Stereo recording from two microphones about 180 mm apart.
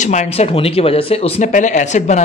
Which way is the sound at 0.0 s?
40° left (ahead or behind).